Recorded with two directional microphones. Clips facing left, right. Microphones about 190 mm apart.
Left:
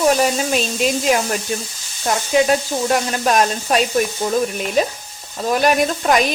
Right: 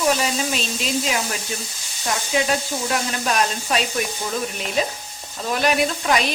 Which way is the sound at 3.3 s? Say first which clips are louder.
Left 6 dB; 45° left (ahead or behind).